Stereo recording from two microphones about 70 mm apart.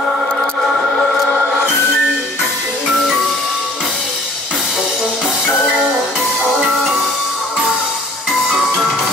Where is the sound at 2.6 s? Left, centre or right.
Centre.